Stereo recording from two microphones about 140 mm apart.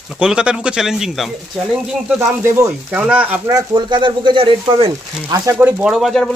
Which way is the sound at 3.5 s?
30° right (ahead or behind).